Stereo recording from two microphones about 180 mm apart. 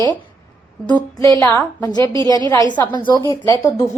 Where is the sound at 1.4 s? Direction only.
20° left (ahead or behind).